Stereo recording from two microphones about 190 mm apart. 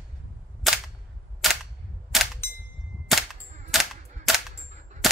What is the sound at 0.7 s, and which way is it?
Cap gun, centre (ahead or behind).